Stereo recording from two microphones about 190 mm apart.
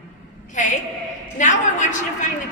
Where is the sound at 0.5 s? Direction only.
40° left (ahead or behind).